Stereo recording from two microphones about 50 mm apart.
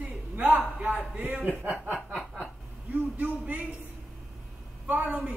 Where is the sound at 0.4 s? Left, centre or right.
Right.